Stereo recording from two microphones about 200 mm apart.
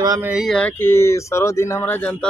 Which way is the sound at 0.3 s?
Centre (ahead or behind).